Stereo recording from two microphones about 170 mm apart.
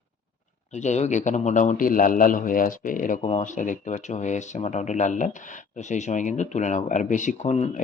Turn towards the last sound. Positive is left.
turn(degrees=40)  # may be behind; listen again after turning